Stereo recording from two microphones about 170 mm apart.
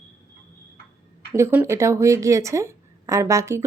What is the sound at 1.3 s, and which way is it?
A woman's voice, 10° right (ahead or behind).